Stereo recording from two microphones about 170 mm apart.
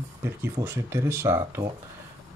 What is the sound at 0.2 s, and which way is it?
Speech, 15° right (ahead or behind).